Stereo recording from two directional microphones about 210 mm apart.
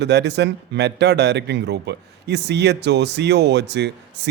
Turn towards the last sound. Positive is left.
turn(degrees=-55)  # may be behind; listen again after turning